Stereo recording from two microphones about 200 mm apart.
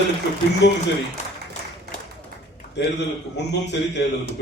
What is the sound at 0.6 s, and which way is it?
Speech, 60° left (ahead or behind).